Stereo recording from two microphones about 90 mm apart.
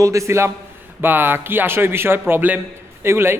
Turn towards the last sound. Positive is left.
turn(degrees=-25)  # may be behind; listen again after turning